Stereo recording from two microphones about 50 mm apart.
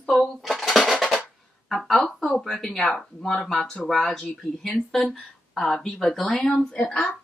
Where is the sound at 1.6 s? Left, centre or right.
Centre.